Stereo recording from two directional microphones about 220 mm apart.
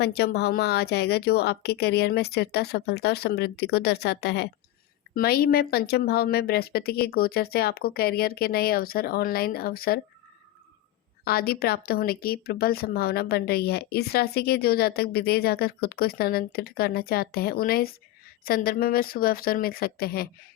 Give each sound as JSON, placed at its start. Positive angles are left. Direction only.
{"t": 0.0, "sound": "speech", "side_deg": 45}
{"t": 11.3, "sound": "speech", "side_deg": 45}